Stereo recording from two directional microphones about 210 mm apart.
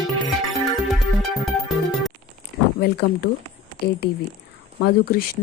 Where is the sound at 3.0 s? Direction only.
50° left (ahead or behind).